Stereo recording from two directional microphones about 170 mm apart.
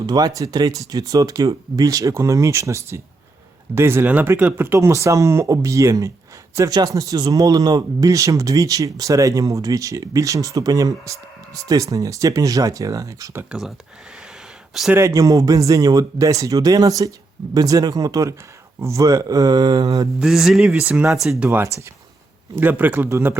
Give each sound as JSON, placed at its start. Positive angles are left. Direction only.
{"t": 0.0, "sound": "speech", "side_deg": -25}
{"t": 13.5, "sound": "speech", "side_deg": 0}
{"t": 14.9, "sound": "speech", "side_deg": -20}
{"t": 20.1, "sound": "speech", "side_deg": 0}